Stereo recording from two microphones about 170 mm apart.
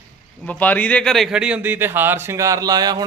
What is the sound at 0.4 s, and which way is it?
Speech, 10° left (ahead or behind).